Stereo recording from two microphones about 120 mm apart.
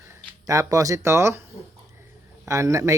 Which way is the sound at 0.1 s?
25° right (ahead or behind).